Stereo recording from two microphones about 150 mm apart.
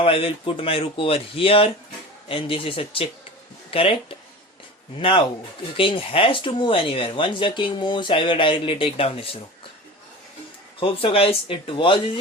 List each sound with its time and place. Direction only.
0.0 s speech: 40° left (ahead or behind)
4.9 s speech: 35° left (ahead or behind)
10.8 s speech: 40° left (ahead or behind)